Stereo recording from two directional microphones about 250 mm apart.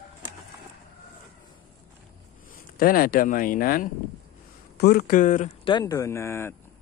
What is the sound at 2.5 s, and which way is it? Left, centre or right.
Speech, left.